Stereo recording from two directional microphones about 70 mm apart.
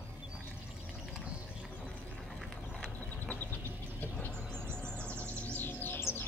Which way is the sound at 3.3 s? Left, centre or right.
Left.